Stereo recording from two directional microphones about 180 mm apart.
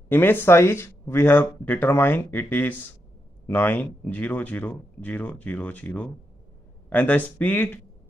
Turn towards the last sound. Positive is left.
turn(degrees=10)  # may be behind; listen again after turning